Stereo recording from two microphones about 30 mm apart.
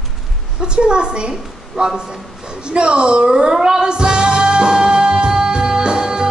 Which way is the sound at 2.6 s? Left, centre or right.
Right.